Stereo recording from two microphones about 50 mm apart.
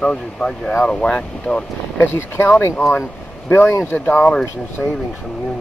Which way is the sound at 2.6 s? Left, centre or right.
Left.